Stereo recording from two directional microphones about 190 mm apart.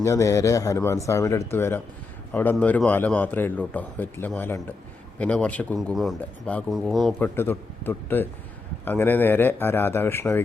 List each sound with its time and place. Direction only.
0.0 s a man's voice: 15° left (ahead or behind)